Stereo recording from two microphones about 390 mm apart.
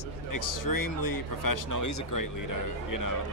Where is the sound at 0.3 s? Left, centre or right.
Left.